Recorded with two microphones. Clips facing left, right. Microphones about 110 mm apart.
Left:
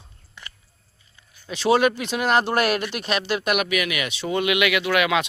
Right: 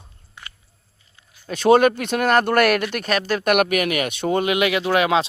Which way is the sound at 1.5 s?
50° right (ahead or behind).